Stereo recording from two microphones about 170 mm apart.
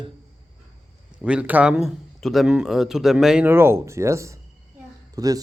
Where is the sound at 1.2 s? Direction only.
5° right (ahead or behind).